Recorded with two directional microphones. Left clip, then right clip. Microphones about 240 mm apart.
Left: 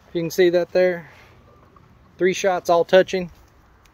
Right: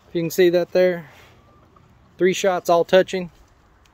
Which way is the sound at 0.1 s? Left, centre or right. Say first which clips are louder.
Even; right.